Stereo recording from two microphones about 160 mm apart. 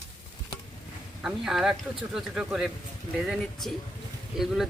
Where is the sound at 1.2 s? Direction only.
5° right (ahead or behind).